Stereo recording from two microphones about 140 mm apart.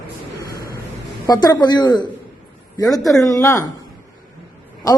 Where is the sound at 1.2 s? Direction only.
25° left (ahead or behind).